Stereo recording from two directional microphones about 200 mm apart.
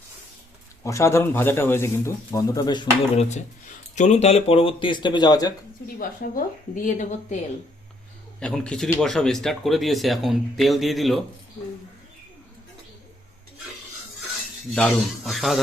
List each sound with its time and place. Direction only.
0.9 s speech: 15° left (ahead or behind)
3.2 s speech: 35° left (ahead or behind); by 5.5 s 20° left (ahead or behind)
6.0 s speech: 40° left (ahead or behind)
8.4 s speech: 5° left (ahead or behind)
14.7 s speech: centre (ahead or behind)